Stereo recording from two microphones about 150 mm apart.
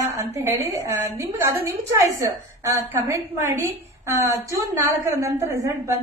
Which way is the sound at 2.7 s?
20° right (ahead or behind).